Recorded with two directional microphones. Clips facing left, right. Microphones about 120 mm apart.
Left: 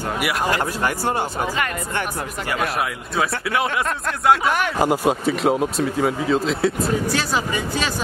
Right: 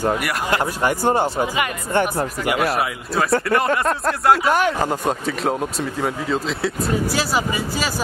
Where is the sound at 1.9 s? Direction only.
35° right (ahead or behind).